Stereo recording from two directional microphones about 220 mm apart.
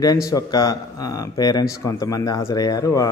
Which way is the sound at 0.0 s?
15° left (ahead or behind).